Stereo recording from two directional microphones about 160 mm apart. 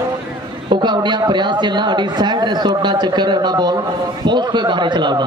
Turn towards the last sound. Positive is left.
turn(degrees=-30)  # may be behind; listen again after turning